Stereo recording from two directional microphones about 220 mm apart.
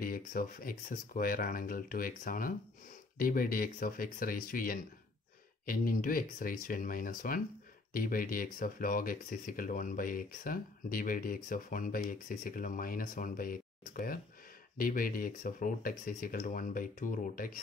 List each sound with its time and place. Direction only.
0.0 s speech: 40° left (ahead or behind)